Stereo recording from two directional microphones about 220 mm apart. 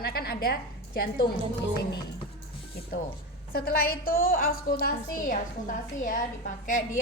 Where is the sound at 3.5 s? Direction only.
40° left (ahead or behind).